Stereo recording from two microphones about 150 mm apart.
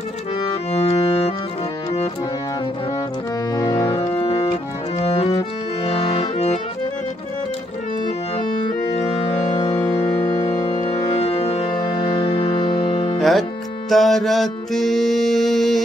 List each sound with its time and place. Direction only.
0.7 s music: 25° left (ahead or behind)
3.5 s organ: 20° left (ahead or behind)
5.9 s accordion: 40° left (ahead or behind)
8.6 s organ: 35° left (ahead or behind)
11.1 s music: 45° left (ahead or behind)
13.2 s music: centre (ahead or behind)